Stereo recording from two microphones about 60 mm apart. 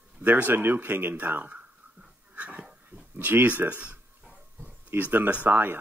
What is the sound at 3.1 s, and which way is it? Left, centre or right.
Speech, right.